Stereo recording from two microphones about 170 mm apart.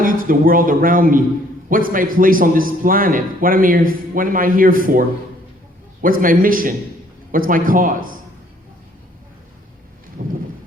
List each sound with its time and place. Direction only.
0.0 s a man's voice: 55° right (ahead or behind)